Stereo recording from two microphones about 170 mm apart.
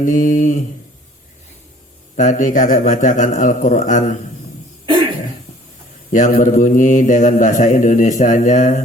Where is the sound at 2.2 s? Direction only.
45° left (ahead or behind).